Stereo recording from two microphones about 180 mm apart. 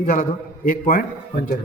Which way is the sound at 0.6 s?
50° left (ahead or behind).